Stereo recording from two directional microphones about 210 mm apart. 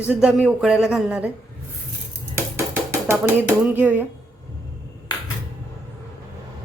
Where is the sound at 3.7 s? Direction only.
10° right (ahead or behind).